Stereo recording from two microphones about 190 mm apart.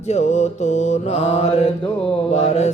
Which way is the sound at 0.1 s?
35° left (ahead or behind).